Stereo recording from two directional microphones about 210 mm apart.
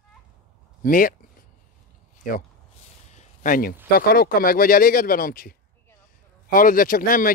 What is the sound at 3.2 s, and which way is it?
Speech, 40° left (ahead or behind).